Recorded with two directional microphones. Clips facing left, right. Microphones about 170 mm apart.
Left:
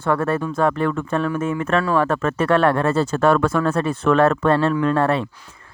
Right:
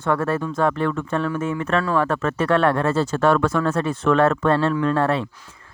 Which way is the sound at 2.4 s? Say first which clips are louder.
Left 1 dB; 30° left (ahead or behind).